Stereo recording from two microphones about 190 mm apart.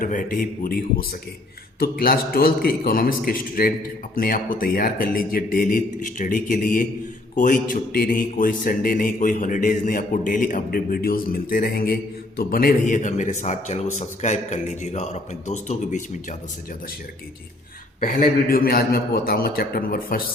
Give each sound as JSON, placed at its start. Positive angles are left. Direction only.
{"t": 0.0, "sound": "a man's voice", "side_deg": 45}
{"t": 18.0, "sound": "a man's voice", "side_deg": 50}